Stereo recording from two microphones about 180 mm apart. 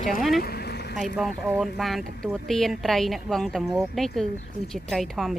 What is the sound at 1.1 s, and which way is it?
Speech, 5° right (ahead or behind).